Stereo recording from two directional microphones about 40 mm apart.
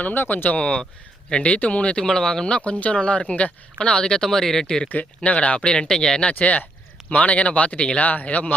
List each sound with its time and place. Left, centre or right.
0.0 s speech: left
0.5 s speech: left
2.0 s speech: centre
2.6 s speech: left; by 4.6 s centre
4.9 s speech: left
5.7 s speech: centre
8.0 s speech: left